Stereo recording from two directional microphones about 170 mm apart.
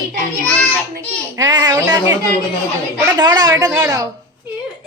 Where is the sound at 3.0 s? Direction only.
25° right (ahead or behind).